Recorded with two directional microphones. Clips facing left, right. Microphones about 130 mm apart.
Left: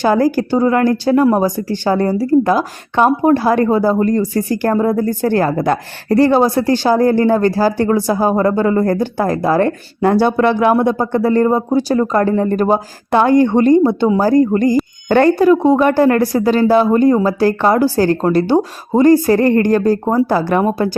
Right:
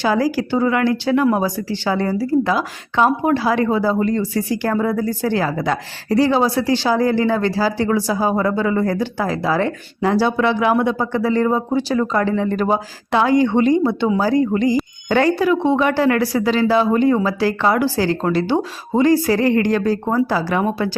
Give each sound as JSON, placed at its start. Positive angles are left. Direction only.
{"t": 0.0, "sound": "speech", "side_deg": 50}
{"t": 1.6, "sound": "speech", "side_deg": 45}